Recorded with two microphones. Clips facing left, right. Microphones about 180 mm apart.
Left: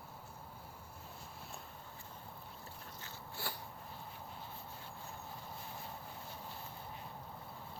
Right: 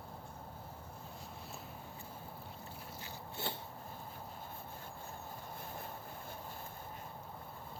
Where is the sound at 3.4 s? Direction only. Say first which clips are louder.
Right 4 dB; 20° right (ahead or behind).